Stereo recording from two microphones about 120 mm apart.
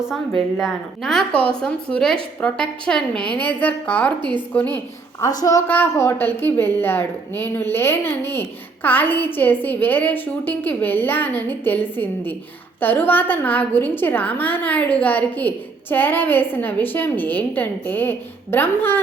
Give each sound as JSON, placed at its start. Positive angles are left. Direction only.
{"t": 0.0, "sound": "a woman's voice", "side_deg": -5}
{"t": 5.2, "sound": "a woman's voice", "side_deg": 30}
{"t": 5.6, "sound": "a woman's voice", "side_deg": 15}